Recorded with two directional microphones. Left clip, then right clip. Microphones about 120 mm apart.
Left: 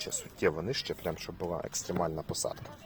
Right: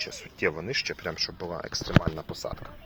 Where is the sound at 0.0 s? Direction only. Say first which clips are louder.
Right 2 dB; 5° left (ahead or behind).